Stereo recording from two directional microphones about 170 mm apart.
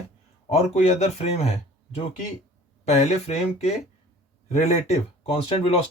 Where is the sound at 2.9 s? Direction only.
40° left (ahead or behind).